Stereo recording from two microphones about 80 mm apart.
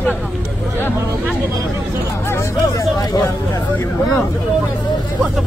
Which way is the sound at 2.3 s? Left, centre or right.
Left.